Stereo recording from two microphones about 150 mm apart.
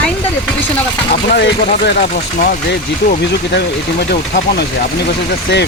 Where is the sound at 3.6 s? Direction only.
90° left.